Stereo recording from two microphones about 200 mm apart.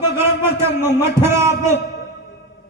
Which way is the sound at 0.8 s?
10° right (ahead or behind).